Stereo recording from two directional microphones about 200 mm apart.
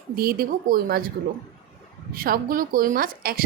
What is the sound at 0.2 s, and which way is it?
Speech, 50° right (ahead or behind).